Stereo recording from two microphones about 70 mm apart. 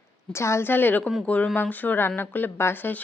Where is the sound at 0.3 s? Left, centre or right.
Left.